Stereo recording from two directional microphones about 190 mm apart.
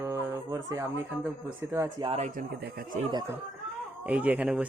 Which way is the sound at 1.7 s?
15° right (ahead or behind).